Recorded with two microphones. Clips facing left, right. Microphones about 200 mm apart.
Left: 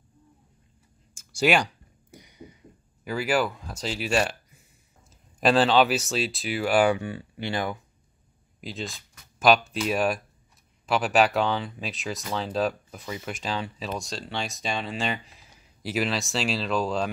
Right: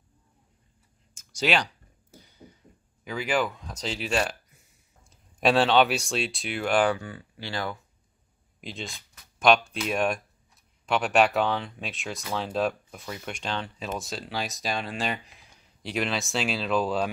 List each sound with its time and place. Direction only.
1.3 s a sound: 10° left (ahead or behind)
3.0 s speech: 5° left (ahead or behind)
7.0 s speech: 20° left (ahead or behind)
8.5 s speech: centre (ahead or behind)